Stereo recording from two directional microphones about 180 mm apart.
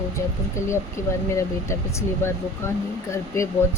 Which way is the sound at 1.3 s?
15° left (ahead or behind).